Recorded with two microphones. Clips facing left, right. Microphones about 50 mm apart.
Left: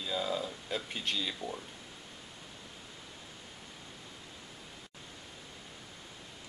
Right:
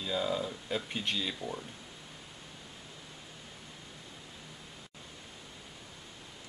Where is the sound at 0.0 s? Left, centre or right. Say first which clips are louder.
Right 2 dB; centre.